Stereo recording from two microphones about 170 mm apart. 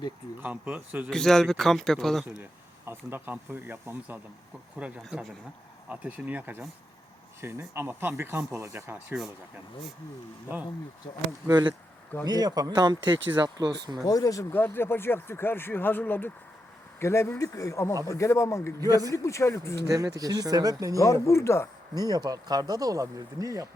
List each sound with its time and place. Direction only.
0.3 s speech: 10° right (ahead or behind)
1.1 s speech: 5° left (ahead or behind)
2.4 s speech: 15° right (ahead or behind)
5.0 s speech: 5° left (ahead or behind)
5.9 s speech: 10° right (ahead or behind)
11.4 s speech: 25° right (ahead or behind)
14.0 s speech: 20° left (ahead or behind)
18.9 s speech: 20° right (ahead or behind)
19.1 s speech: 15° left (ahead or behind)
20.1 s speech: 20° right (ahead or behind)
21.0 s speech: 15° left (ahead or behind)
21.9 s speech: 20° right (ahead or behind)